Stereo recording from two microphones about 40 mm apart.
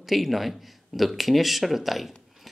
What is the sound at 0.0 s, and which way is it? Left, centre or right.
Speech, centre.